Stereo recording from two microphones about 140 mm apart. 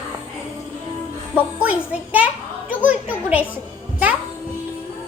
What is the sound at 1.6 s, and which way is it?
Speech, 10° right (ahead or behind).